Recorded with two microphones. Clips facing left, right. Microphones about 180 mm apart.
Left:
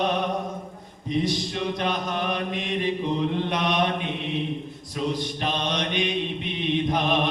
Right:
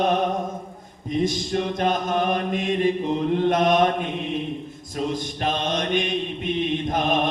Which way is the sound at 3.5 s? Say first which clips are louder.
Right 8 dB; 45° right (ahead or behind).